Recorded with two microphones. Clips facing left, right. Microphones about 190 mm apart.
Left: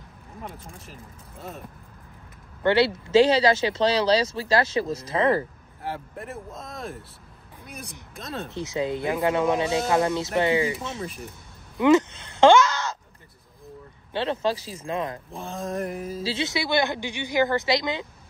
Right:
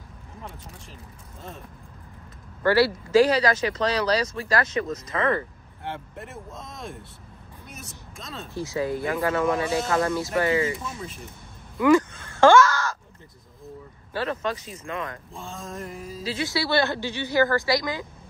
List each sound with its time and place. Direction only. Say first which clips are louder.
2.6 s speech: even; 20° left (ahead or behind)
5.9 s speech: left 2 dB; centre (ahead or behind)
8.5 s speech: right 1 dB; 20° left (ahead or behind)
11.8 s caw: even; 20° left (ahead or behind)
14.1 s speech: left 3 dB; 25° left (ahead or behind)
15.3 s mantra: left 5 dB; 20° left (ahead or behind)
16.2 s speech: right 2 dB; 25° left (ahead or behind)